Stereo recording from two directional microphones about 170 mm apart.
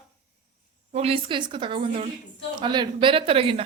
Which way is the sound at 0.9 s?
35° right (ahead or behind).